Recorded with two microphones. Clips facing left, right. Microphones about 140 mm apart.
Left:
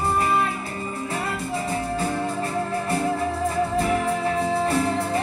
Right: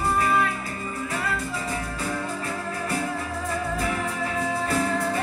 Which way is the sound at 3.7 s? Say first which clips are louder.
Left 5 dB; 30° left (ahead or behind).